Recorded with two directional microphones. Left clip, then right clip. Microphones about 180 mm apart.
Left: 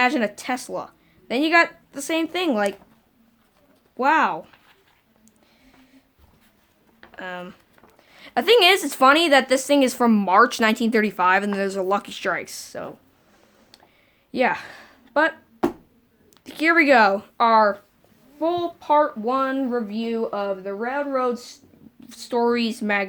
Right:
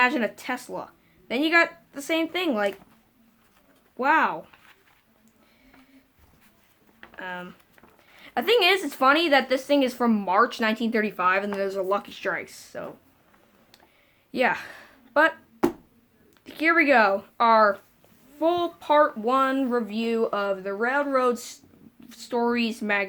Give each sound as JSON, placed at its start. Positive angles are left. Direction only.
{"t": 0.0, "sound": "speech", "side_deg": 35}
{"t": 3.9, "sound": "speech", "side_deg": 35}
{"t": 7.2, "sound": "a woman's voice", "side_deg": 35}
{"t": 14.3, "sound": "a sound", "side_deg": 25}
{"t": 16.4, "sound": "speech", "side_deg": 40}
{"t": 18.3, "sound": "speech", "side_deg": 10}
{"t": 22.0, "sound": "speech", "side_deg": 30}